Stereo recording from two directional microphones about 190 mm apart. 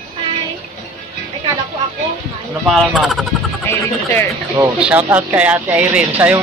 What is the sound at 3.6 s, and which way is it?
Speech, 15° left (ahead or behind).